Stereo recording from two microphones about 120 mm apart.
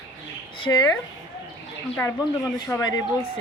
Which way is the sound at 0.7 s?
25° left (ahead or behind).